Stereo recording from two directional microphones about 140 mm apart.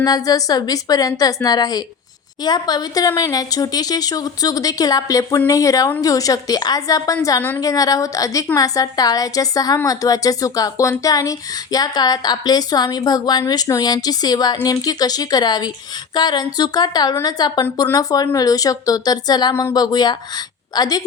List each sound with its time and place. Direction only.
0.0 s a woman's voice: 25° left (ahead or behind)